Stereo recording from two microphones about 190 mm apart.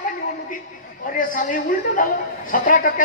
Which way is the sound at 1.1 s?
45° left (ahead or behind).